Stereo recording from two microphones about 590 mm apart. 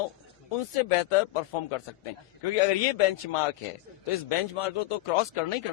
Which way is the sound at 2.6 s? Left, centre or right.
Left.